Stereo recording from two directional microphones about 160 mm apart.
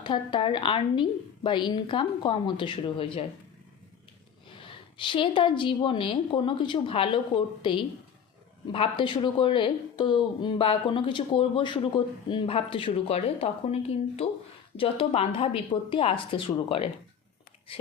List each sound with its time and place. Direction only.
0.0 s speech: 30° left (ahead or behind)
4.5 s speech: 30° left (ahead or behind)